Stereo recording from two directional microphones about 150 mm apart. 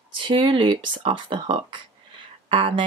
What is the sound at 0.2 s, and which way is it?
Speech, 35° right (ahead or behind).